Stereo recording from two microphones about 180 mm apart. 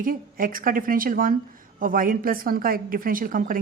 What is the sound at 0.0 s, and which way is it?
Speech, 50° right (ahead or behind).